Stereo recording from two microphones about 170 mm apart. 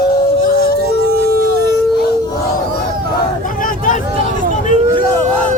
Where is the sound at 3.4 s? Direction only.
55° left (ahead or behind).